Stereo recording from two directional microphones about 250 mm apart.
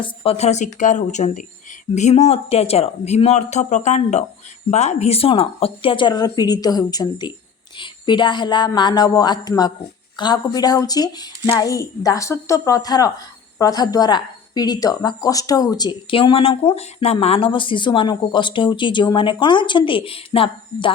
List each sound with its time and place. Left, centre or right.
0.0 s a woman's voice: left